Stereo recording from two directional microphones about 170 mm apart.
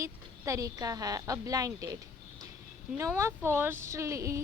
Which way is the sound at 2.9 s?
15° right (ahead or behind).